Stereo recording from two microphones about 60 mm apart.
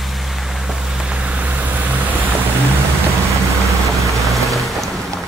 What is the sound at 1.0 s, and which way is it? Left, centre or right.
Vehicle, centre.